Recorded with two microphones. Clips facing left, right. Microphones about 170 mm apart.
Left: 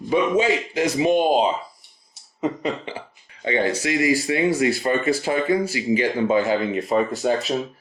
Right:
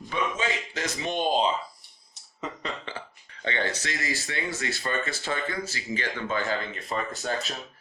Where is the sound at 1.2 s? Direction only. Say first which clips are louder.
Left 6 dB; 45° left (ahead or behind).